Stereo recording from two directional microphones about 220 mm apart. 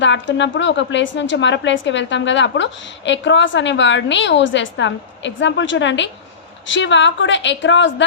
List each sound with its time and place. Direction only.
0.0 s a woman's voice: 55° left (ahead or behind)